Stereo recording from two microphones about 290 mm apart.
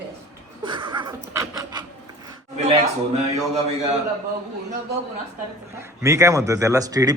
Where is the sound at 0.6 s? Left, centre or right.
Centre.